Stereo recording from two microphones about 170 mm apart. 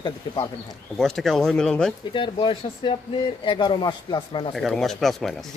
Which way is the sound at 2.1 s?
30° left (ahead or behind).